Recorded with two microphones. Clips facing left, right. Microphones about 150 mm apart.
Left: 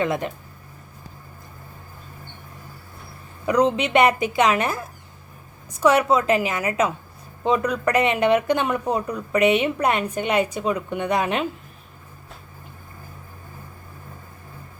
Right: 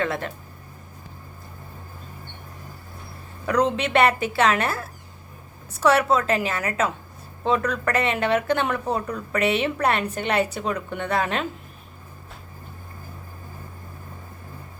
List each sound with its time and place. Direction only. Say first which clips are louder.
0.0 s speech: left 3 dB; 15° left (ahead or behind)
3.4 s speech: left 2 dB; 10° left (ahead or behind)